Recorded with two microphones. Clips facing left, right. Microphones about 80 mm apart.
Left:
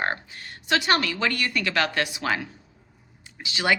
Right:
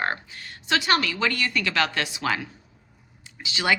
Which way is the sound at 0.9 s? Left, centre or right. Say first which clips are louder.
Right 2 dB; left.